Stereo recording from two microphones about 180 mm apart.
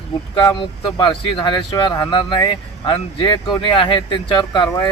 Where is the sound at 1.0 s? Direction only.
25° left (ahead or behind).